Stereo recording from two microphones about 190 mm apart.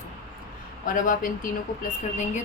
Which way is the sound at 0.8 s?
45° left (ahead or behind).